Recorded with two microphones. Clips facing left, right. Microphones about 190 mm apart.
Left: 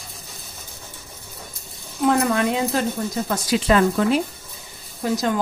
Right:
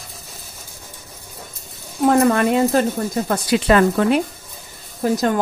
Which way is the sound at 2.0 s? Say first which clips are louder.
Right 4 dB; 50° right (ahead or behind).